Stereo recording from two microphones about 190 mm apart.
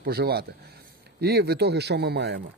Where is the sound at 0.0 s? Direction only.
55° right (ahead or behind).